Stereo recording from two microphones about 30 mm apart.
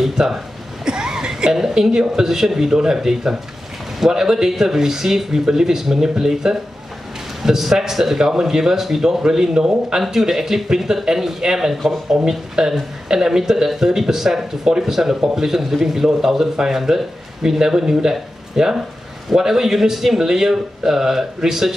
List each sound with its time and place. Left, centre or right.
0.1 s speech: centre
0.8 s a sound: right
1.5 s a man's voice: centre
10.0 s a man's voice: centre